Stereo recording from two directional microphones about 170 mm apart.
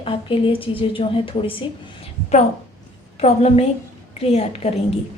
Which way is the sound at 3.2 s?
35° left (ahead or behind).